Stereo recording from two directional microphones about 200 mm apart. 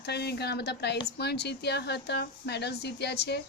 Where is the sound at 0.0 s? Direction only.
55° left (ahead or behind).